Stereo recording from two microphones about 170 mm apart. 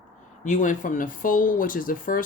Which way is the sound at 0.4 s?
50° left (ahead or behind).